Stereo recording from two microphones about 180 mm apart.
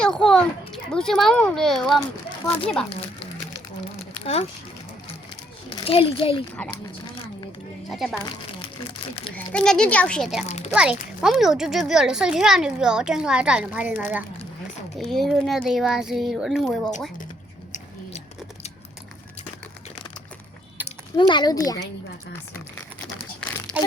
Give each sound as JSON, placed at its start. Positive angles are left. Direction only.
{"t": 0.0, "sound": "a sound", "side_deg": 5}
{"t": 0.9, "sound": "a child's voice", "side_deg": 5}
{"t": 2.0, "sound": "speech", "side_deg": 20}
{"t": 4.2, "sound": "speech", "side_deg": 35}
{"t": 5.6, "sound": "a child's voice", "side_deg": 30}
{"t": 7.9, "sound": "a child's voice", "side_deg": 0}
{"t": 9.2, "sound": "a child's voice", "side_deg": 5}
{"t": 10.4, "sound": "speech", "side_deg": 35}
{"t": 10.8, "sound": "a child's voice", "side_deg": -5}
{"t": 20.8, "sound": "speech", "side_deg": 25}